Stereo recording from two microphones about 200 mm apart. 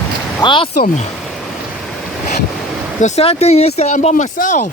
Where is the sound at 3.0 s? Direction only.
35° left (ahead or behind).